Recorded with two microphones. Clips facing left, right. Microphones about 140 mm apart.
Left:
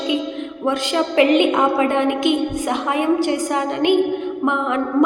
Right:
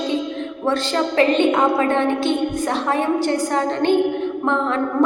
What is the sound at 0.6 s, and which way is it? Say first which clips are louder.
A woman's voice: left 1 dB; 15° left (ahead or behind).